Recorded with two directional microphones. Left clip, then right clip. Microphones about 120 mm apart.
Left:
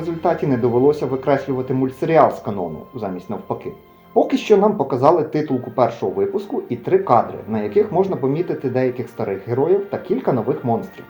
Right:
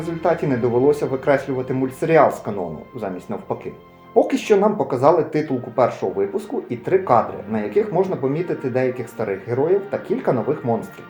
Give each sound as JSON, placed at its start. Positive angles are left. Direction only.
{"t": 0.2, "sound": "speech", "side_deg": 35}